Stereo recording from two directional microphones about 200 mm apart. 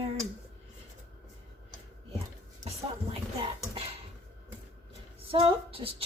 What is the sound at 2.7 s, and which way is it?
A woman's voice, 30° right (ahead or behind).